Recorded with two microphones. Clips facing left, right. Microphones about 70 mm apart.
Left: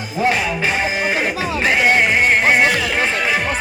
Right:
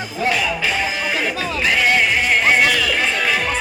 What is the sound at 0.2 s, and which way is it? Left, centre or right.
Music, left.